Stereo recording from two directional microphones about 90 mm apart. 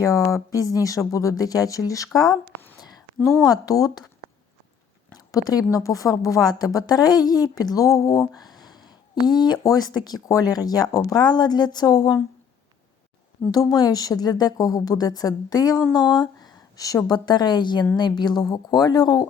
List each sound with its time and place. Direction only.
0.0 s speech: 40° left (ahead or behind)
3.4 s speech: 45° left (ahead or behind)
5.3 s speech: 45° left (ahead or behind)
13.5 s speech: 45° left (ahead or behind)
16.0 s a woman's voice: 50° left (ahead or behind)